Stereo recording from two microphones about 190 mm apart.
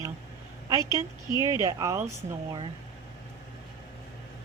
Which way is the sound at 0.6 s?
20° right (ahead or behind).